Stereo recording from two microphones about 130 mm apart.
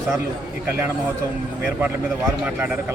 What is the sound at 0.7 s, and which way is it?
Speech, 15° right (ahead or behind).